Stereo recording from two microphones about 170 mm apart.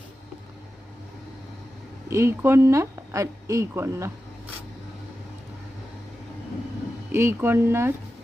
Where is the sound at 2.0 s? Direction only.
15° right (ahead or behind).